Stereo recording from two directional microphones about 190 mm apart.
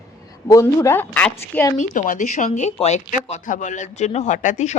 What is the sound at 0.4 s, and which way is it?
A woman's voice, 15° left (ahead or behind).